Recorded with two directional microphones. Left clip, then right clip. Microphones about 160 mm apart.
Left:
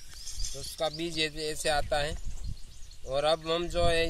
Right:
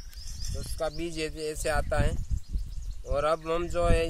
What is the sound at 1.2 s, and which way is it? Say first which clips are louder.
Speech: left 1 dB; 15° right (ahead or behind).